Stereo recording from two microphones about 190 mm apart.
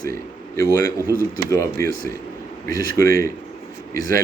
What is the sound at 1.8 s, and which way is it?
Speech, 50° right (ahead or behind).